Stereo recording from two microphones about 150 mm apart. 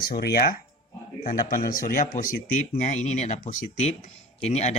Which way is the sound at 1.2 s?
65° left (ahead or behind).